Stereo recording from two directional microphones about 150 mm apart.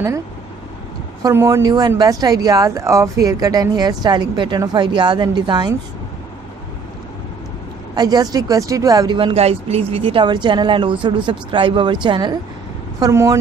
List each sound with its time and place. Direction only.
1.2 s a woman's voice: 20° right (ahead or behind)
7.9 s speech: 25° right (ahead or behind)
13.0 s a woman's voice: 20° right (ahead or behind)